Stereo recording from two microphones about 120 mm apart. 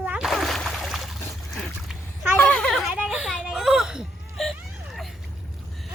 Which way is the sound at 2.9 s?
10° right (ahead or behind).